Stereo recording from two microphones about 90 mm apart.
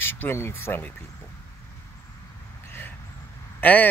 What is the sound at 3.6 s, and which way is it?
Speech, 20° left (ahead or behind).